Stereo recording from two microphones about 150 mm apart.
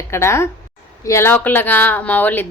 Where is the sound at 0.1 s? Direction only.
20° left (ahead or behind).